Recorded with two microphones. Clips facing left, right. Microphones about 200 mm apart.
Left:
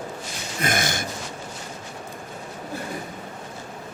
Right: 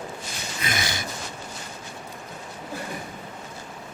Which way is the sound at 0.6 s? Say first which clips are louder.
Left 5 dB; 50° left (ahead or behind).